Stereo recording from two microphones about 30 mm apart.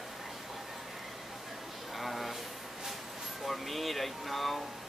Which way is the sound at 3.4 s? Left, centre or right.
Centre.